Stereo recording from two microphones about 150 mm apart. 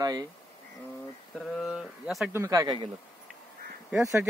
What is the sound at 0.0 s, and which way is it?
Speech, 25° right (ahead or behind).